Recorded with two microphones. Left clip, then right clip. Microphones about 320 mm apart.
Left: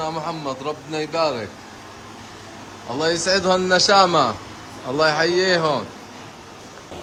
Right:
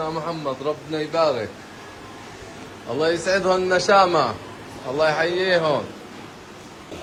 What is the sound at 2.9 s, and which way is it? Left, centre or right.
A man's voice, centre.